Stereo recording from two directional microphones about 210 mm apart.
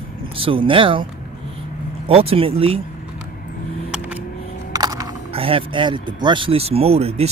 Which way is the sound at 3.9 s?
5° right (ahead or behind).